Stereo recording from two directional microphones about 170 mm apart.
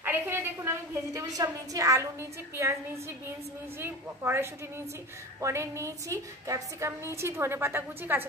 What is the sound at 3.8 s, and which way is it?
A woman's voice, 15° right (ahead or behind).